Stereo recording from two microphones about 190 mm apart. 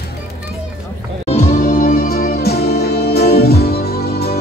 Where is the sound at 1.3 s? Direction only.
40° left (ahead or behind); by 4.3 s 55° left (ahead or behind).